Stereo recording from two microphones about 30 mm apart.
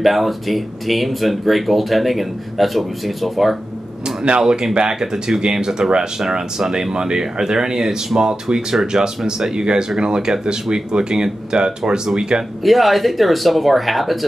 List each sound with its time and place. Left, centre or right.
0.0 s speech: centre
4.4 s speech: right
11.5 s speech: centre
12.2 s speech: right
12.6 s speech: centre